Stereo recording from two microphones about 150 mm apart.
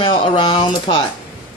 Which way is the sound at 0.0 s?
35° left (ahead or behind).